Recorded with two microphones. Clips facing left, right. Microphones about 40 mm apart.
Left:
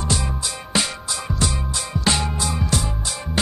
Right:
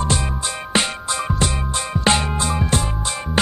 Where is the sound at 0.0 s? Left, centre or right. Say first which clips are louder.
Right 3 dB; right.